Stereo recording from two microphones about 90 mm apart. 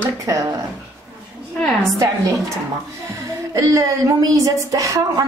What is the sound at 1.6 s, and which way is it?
Speech, 5° left (ahead or behind).